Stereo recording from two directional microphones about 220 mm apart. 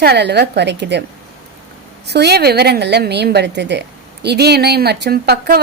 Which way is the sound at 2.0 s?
50° right (ahead or behind).